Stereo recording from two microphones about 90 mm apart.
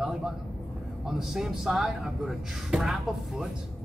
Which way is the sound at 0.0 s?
5° right (ahead or behind).